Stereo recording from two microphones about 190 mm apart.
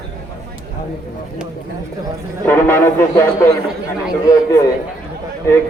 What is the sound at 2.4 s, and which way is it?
A man's voice, 10° left (ahead or behind).